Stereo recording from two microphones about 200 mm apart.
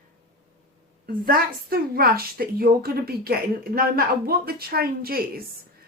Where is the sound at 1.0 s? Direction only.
45° right (ahead or behind).